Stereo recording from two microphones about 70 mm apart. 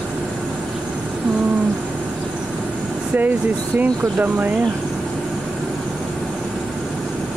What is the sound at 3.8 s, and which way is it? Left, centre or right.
Speech, right.